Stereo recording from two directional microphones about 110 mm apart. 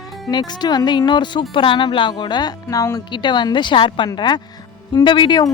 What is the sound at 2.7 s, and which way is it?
Speech, 30° left (ahead or behind).